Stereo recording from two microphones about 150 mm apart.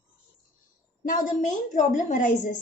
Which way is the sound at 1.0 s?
65° left (ahead or behind).